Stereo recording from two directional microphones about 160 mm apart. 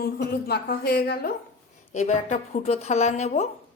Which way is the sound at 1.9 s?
45° left (ahead or behind).